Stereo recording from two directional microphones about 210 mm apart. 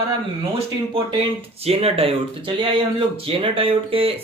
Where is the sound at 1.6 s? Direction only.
30° right (ahead or behind).